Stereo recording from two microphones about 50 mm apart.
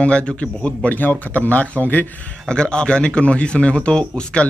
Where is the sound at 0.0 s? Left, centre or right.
Left.